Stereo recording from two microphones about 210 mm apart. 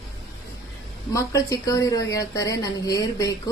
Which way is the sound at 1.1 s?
15° left (ahead or behind).